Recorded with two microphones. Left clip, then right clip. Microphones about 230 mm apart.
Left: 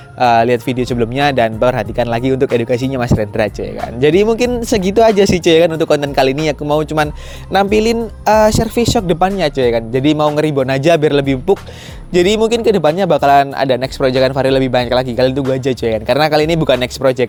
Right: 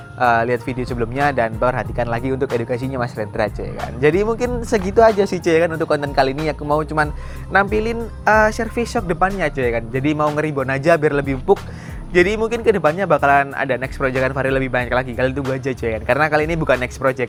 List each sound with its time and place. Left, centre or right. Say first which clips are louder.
0.2 s speech: left 5 dB; left